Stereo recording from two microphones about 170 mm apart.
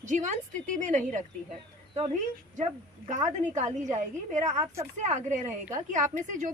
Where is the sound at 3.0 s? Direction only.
45° right (ahead or behind).